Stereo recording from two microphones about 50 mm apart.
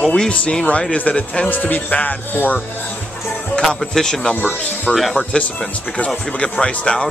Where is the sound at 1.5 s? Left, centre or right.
Left.